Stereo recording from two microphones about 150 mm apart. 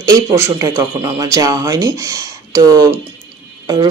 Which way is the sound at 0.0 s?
20° right (ahead or behind).